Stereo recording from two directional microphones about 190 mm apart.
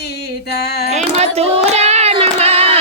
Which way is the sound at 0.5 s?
55° left (ahead or behind).